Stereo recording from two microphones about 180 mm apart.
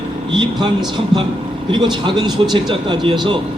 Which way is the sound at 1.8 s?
25° right (ahead or behind).